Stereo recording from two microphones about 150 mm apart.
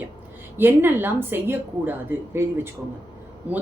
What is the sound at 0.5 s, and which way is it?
A woman's voice, 15° right (ahead or behind).